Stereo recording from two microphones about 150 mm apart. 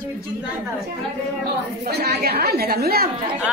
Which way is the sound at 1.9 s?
90° right.